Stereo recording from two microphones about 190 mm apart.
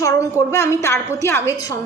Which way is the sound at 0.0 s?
15° left (ahead or behind).